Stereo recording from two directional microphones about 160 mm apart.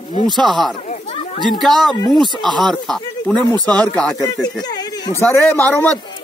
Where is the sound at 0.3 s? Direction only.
25° right (ahead or behind).